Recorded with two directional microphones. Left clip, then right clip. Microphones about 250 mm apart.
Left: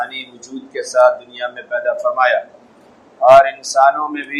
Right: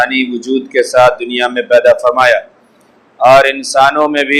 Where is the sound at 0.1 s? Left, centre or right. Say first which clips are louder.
Right 15 dB; right.